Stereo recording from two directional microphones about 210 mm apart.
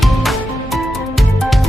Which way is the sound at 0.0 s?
Centre (ahead or behind).